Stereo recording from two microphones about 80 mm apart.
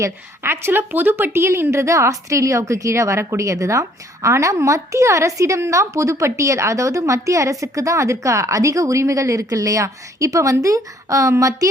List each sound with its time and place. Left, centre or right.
0.0 s a woman's voice: right